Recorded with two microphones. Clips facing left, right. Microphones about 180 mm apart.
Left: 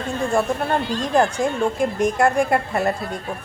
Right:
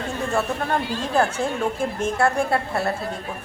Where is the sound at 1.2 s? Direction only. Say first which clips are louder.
Left 3 dB; 15° left (ahead or behind).